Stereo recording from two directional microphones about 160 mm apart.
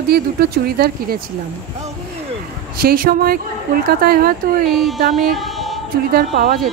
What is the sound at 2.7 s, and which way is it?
Speech, 65° right (ahead or behind).